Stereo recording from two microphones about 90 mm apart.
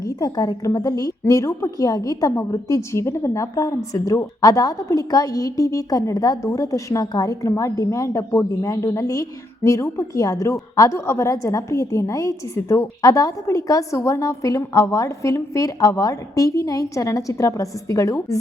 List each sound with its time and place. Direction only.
0.0 s a woman's voice: 45° left (ahead or behind)